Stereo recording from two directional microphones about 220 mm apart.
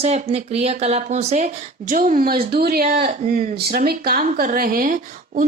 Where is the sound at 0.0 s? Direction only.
30° right (ahead or behind).